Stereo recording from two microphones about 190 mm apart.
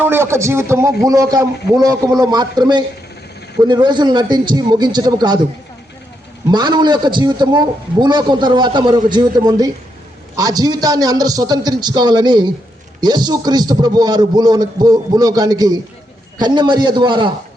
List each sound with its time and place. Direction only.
0.0 s a man's voice: 10° right (ahead or behind)
6.5 s a man's voice: 20° right (ahead or behind)